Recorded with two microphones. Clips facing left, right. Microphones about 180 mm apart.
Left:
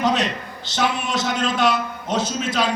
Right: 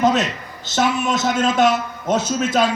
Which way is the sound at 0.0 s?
45° right (ahead or behind).